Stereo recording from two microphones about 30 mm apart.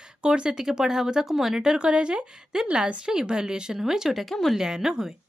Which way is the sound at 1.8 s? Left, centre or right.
Right.